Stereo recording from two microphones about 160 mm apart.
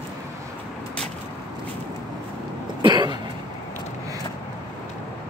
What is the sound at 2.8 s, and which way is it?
Cough, 30° right (ahead or behind).